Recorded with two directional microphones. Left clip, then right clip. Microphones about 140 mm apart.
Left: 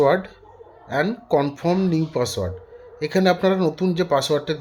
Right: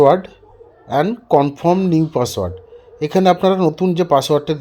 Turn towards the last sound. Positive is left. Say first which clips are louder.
# right 6 dB
turn(degrees=-30)  # may be behind; listen again after turning